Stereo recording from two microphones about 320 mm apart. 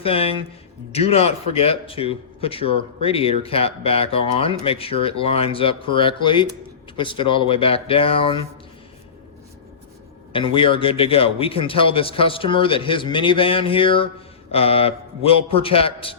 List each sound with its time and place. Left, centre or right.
0.0 s speech: centre
10.3 s speech: centre